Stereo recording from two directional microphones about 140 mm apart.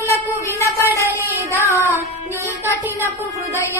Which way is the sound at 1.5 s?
20° right (ahead or behind).